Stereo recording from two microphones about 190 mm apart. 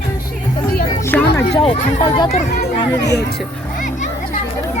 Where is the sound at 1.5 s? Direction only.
30° left (ahead or behind).